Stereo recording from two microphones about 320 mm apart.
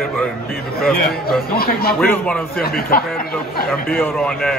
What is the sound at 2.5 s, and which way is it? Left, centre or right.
Speech, left.